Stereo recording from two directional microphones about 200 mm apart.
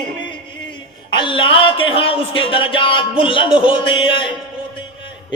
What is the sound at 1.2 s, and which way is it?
Speech, 25° left (ahead or behind).